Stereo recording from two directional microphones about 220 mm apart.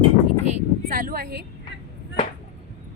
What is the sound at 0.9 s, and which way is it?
Speech, 40° right (ahead or behind).